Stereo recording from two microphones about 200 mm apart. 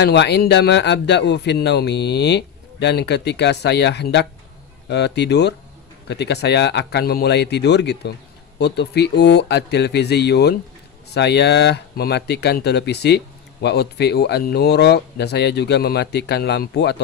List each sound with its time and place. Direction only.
0.0 s speech: 55° left (ahead or behind)